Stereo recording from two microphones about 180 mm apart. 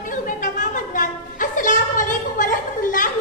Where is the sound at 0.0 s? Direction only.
45° left (ahead or behind).